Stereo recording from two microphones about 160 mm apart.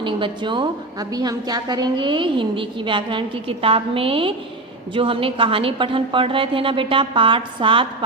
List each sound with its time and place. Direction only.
0.0 s a woman's voice: 30° right (ahead or behind)